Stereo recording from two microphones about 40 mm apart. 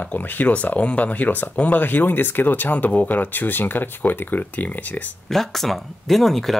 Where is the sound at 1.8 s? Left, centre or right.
Left.